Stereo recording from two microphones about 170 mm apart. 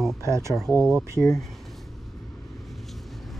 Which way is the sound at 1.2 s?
5° left (ahead or behind).